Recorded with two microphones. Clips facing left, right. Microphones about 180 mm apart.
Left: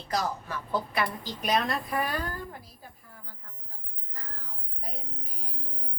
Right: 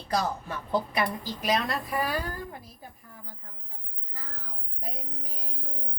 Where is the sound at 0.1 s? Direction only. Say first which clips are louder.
Right 2 dB; 25° right (ahead or behind).